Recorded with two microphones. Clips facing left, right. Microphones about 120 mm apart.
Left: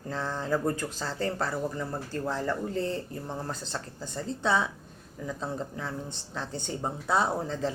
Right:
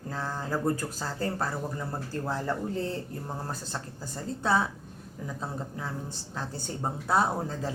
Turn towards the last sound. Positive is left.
turn(degrees=0)  # may be behind; listen again after turning